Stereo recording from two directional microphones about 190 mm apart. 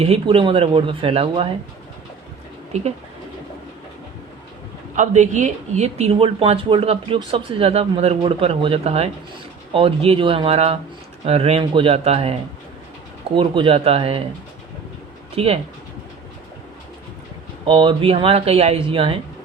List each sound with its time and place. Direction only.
0.0 s speech: 30° right (ahead or behind)
2.7 s speech: 35° right (ahead or behind)
4.9 s speech: 40° right (ahead or behind)
15.4 s speech: 30° right (ahead or behind)
17.7 s speech: 25° right (ahead or behind)